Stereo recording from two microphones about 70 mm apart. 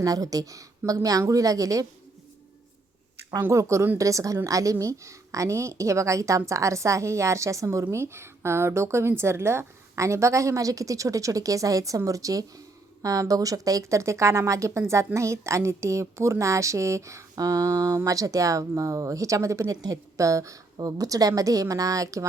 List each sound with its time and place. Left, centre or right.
0.0 s speech: right
3.5 s a woman's voice: right
19.7 s a woman's voice: right
20.1 s a woman's voice: right
20.7 s speech: right